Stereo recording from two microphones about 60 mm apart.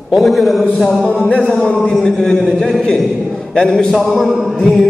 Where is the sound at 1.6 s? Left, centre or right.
Centre.